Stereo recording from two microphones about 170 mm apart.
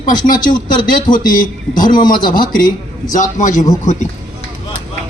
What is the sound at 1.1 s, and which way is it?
Speech, 50° left (ahead or behind).